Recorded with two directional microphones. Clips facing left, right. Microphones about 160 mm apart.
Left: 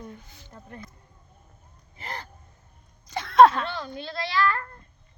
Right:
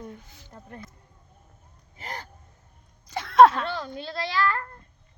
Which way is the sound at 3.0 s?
5° right (ahead or behind).